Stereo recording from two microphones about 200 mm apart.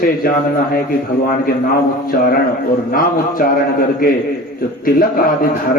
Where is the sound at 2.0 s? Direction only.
45° left (ahead or behind).